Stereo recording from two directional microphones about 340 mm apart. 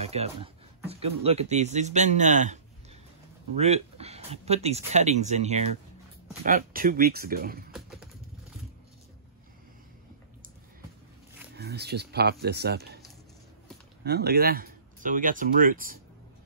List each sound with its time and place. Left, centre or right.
0.0 s speech: centre
11.5 s speech: right
14.0 s speech: right